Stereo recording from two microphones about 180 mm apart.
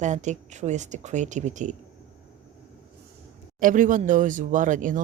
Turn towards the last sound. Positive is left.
turn(degrees=-45)  # may be behind; listen again after turning